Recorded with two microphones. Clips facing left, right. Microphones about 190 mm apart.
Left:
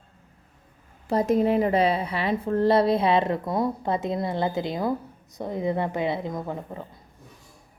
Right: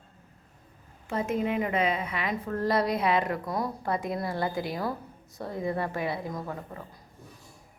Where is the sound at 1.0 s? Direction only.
35° left (ahead or behind).